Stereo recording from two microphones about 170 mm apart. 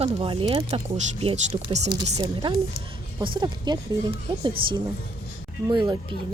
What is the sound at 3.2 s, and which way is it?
Speech, 30° right (ahead or behind).